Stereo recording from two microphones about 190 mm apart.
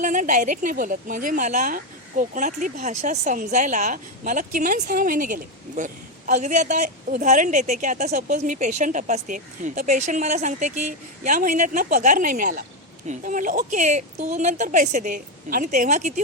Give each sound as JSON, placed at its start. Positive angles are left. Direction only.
{"t": 0.0, "sound": "a woman's voice", "side_deg": -40}